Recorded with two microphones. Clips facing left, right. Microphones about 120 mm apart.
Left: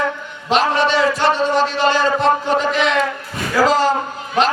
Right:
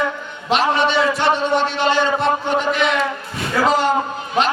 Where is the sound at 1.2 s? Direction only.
35° left (ahead or behind).